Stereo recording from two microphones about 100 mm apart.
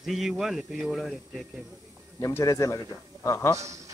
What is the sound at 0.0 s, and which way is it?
Speech, centre (ahead or behind).